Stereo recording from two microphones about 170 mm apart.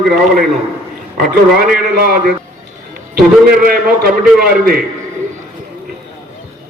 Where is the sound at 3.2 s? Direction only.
60° right (ahead or behind).